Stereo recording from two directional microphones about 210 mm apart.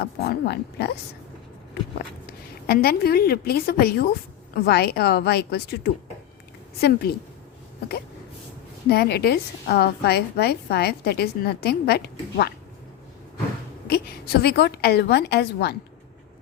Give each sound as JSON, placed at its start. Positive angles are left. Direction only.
{"t": 0.0, "sound": "a woman's voice", "side_deg": 55}
{"t": 2.6, "sound": "a woman's voice", "side_deg": 45}
{"t": 8.9, "sound": "a woman's voice", "side_deg": 50}
{"t": 13.8, "sound": "a woman's voice", "side_deg": 50}